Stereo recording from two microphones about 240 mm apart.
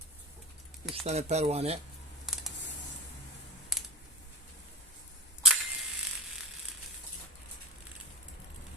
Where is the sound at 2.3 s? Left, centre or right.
Centre.